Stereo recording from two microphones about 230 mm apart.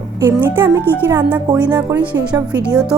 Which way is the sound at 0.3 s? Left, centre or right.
Centre.